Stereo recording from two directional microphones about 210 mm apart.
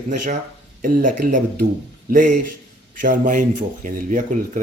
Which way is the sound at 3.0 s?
40° right (ahead or behind).